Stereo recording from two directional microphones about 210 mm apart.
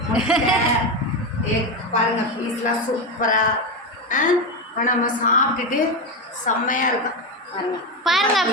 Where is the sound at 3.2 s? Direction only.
35° left (ahead or behind).